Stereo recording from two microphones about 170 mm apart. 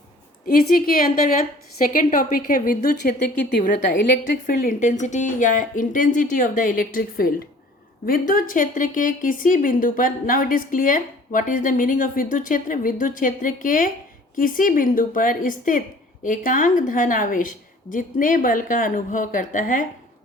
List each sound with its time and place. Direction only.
0.4 s a woman's voice: 60° left (ahead or behind)